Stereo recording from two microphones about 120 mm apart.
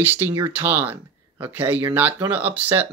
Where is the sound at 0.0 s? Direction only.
15° right (ahead or behind).